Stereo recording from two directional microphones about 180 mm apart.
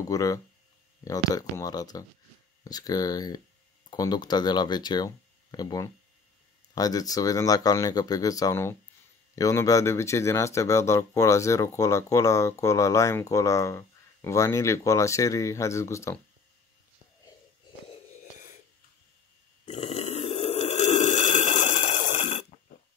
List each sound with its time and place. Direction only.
0.1 s speech: 20° left (ahead or behind)
19.6 s burping: 40° left (ahead or behind)